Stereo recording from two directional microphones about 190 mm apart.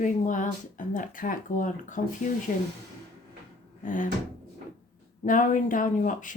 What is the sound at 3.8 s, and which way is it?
Door, 45° left (ahead or behind).